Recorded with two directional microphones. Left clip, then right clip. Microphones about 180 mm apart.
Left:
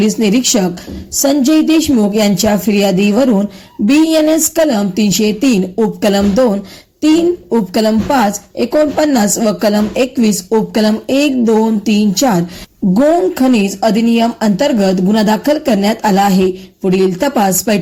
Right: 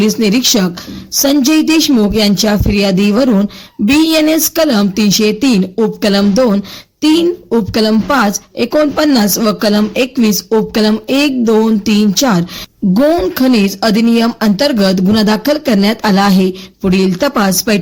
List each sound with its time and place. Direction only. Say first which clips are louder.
0.0 s a woman's voice: right 1 dB; 15° right (ahead or behind)